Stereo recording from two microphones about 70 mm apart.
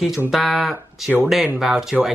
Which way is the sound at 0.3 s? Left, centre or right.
Centre.